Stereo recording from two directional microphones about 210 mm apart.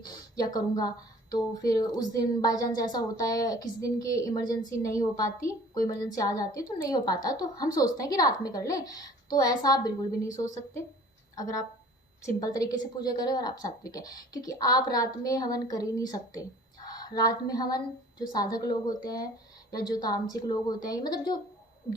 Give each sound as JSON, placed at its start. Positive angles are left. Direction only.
{"t": 0.3, "sound": "a woman's voice", "side_deg": 15}
{"t": 5.7, "sound": "speech", "side_deg": 40}
{"t": 6.0, "sound": "a woman's voice", "side_deg": 15}
{"t": 12.2, "sound": "a woman's voice", "side_deg": 15}